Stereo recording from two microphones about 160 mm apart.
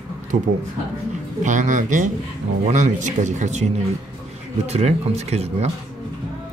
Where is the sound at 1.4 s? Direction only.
50° right (ahead or behind).